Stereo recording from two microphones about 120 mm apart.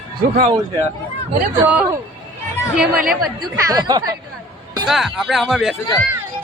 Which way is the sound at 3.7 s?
35° right (ahead or behind).